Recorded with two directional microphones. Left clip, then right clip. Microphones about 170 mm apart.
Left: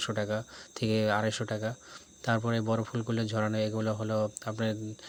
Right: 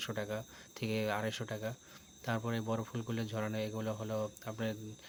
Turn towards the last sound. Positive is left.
turn(degrees=35)  # may be behind; listen again after turning